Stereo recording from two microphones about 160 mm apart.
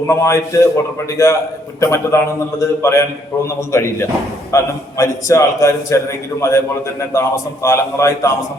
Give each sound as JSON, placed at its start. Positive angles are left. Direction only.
{"t": 0.1, "sound": "a man's voice", "side_deg": 20}